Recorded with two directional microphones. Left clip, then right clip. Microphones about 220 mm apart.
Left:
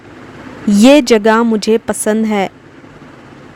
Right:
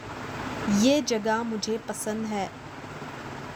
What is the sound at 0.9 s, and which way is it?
Speech, 50° left (ahead or behind).